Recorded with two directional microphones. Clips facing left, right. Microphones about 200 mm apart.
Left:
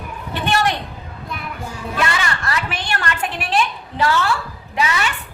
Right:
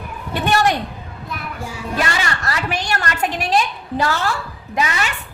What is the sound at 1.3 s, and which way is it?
Child singing, 5° right (ahead or behind).